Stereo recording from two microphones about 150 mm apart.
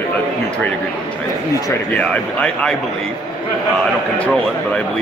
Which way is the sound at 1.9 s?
10° left (ahead or behind).